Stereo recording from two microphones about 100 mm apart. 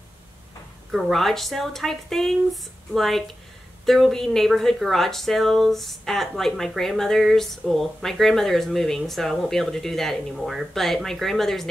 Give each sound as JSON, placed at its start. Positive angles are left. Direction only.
{"t": 0.9, "sound": "speech", "side_deg": 0}